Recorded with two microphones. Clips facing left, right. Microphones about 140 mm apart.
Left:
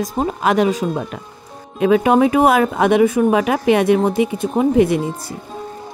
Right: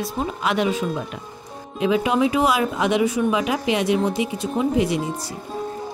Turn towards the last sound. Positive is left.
turn(degrees=55)  # may be behind; listen again after turning